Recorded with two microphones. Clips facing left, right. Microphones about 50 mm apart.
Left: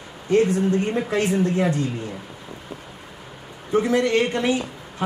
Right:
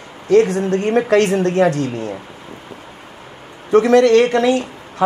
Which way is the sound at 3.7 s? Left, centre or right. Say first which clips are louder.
Right 9 dB; right.